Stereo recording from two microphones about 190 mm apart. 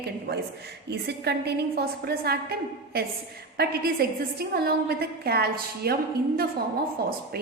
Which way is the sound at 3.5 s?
55° right (ahead or behind).